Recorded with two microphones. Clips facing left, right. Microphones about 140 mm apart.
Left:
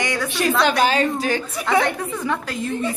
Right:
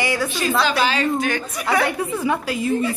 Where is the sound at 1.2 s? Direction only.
30° left (ahead or behind).